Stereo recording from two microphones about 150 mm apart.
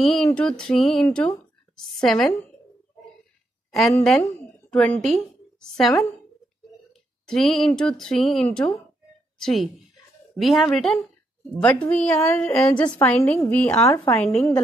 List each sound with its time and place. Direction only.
0.0 s a woman's voice: centre (ahead or behind)
3.9 s a woman's voice: 5° left (ahead or behind); by 14.1 s 20° left (ahead or behind)
14.1 s a woman's voice: 5° left (ahead or behind)